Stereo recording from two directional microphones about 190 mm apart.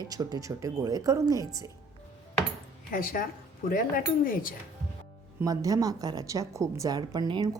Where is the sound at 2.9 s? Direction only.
45° left (ahead or behind).